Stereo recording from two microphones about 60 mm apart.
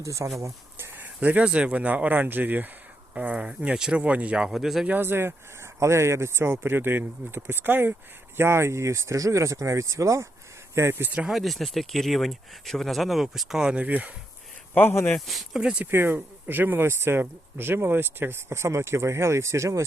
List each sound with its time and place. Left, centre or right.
0.0 s speech: right
0.8 s a sound: right
1.5 s speech: centre
4.4 s speech: centre
4.9 s speech: right
5.8 s speech: right
8.4 s speech: right
10.9 s speech: right
11.3 s speech: centre
13.7 s speech: right
14.7 s speech: left
15.3 s speech: centre
15.6 s speech: centre
15.9 s speech: right